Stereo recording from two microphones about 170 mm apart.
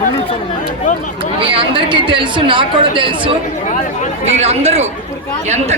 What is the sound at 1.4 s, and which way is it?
Speech, 30° right (ahead or behind).